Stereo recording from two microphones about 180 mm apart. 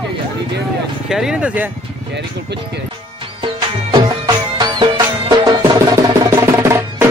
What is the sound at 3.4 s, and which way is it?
Music, 25° right (ahead or behind).